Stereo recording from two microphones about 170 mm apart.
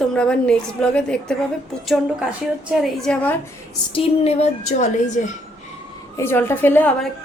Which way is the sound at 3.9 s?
35° left (ahead or behind).